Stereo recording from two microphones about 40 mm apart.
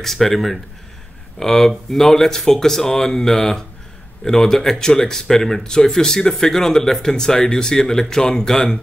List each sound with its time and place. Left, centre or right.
0.0 s speech: centre